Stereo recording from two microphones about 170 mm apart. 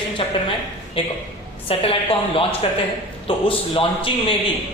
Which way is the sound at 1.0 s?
30° left (ahead or behind).